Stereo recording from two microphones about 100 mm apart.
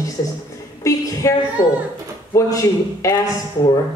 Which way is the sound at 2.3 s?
35° left (ahead or behind).